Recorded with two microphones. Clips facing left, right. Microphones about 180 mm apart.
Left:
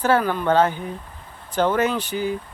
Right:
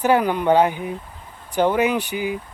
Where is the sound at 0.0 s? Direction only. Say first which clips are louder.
Right 2 dB; 15° right (ahead or behind).